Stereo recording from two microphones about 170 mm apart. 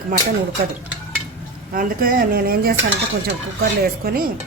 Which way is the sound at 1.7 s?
55° right (ahead or behind).